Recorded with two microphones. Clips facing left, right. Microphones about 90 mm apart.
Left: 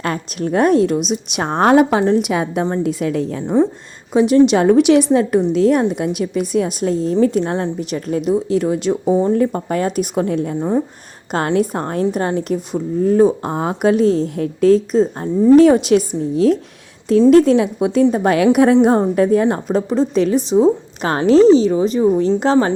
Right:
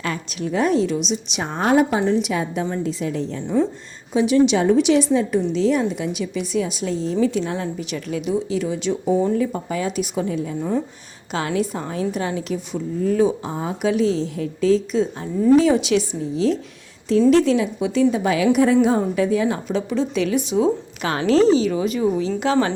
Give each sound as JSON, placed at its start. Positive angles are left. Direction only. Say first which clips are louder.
{"t": 0.0, "sound": "a woman's voice", "louder": "left 5 dB", "side_deg": 50}
{"t": 2.0, "sound": "a woman's voice", "louder": "left 4 dB", "side_deg": 55}
{"t": 10.6, "sound": "a woman's voice", "louder": "left 4 dB", "side_deg": 30}
{"t": 11.3, "sound": "a woman's voice", "louder": "left 6 dB", "side_deg": 50}
{"t": 13.4, "sound": "a woman's voice", "louder": "left 6 dB", "side_deg": 60}
{"t": 13.9, "sound": "a woman's voice", "louder": "left 5 dB", "side_deg": 45}
{"t": 15.5, "sound": "a woman's voice", "louder": "left 7 dB", "side_deg": 55}